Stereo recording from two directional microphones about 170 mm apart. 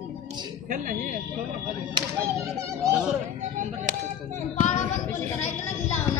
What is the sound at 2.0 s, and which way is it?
Speech, 20° right (ahead or behind).